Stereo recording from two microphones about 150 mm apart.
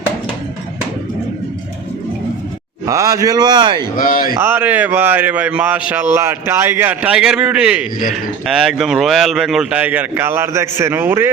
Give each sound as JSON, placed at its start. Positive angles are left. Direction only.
{"t": 2.8, "sound": "a man's voice", "side_deg": -20}
{"t": 3.9, "sound": "speech", "side_deg": 65}
{"t": 4.4, "sound": "speech", "side_deg": -15}